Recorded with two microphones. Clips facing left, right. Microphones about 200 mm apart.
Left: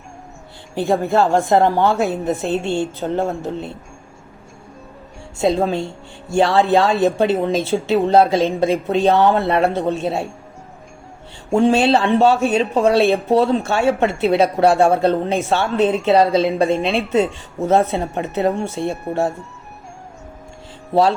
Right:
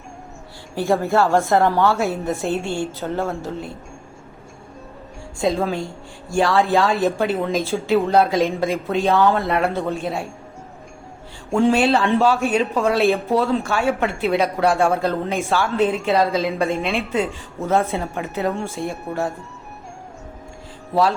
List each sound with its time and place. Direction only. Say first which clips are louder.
0.8 s speech: left 2 dB; 20° left (ahead or behind)
5.4 s speech: left 3 dB; 25° left (ahead or behind)
11.6 s speech: left 1 dB; 25° left (ahead or behind)